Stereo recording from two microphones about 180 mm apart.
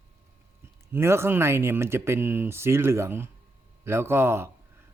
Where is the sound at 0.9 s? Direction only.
15° right (ahead or behind).